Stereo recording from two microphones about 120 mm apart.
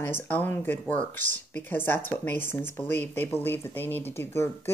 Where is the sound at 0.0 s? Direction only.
15° left (ahead or behind).